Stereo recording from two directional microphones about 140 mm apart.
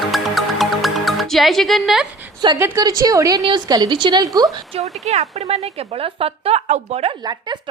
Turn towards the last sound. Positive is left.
turn(degrees=-50)  # may be behind; listen again after turning